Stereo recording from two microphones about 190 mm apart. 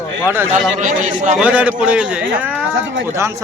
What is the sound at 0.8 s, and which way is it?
Speech, 45° right (ahead or behind).